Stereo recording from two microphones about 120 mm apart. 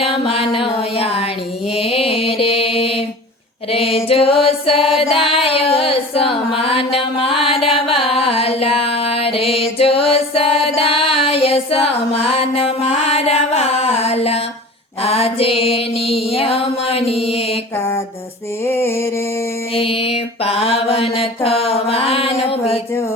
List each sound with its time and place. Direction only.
0.0 s music: 50° left (ahead or behind)
1.7 s mantra: 55° left (ahead or behind)
3.7 s female singing: 55° left (ahead or behind)
7.4 s music: 55° left (ahead or behind)
15.0 s mantra: 55° left (ahead or behind)
18.6 s a sound: 20° left (ahead or behind)
19.7 s mantra: 50° left (ahead or behind)